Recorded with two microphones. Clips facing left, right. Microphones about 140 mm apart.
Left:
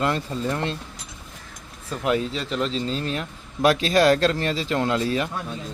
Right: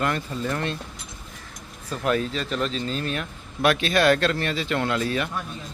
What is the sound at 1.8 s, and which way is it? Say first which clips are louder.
Speech: left 1 dB; 20° left (ahead or behind).